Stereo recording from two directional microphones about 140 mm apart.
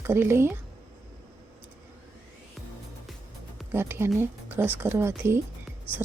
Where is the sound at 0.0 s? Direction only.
15° right (ahead or behind).